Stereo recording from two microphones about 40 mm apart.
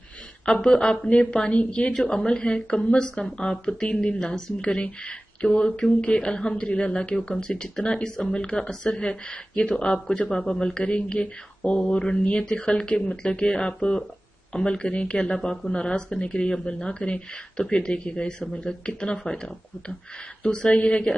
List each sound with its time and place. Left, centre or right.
0.5 s speech: left
2.0 s speech: centre
10.2 s speech: centre
10.8 s speech: left
15.2 s speech: centre
20.4 s speech: left